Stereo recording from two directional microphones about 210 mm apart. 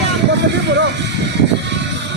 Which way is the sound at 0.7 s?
55° right (ahead or behind).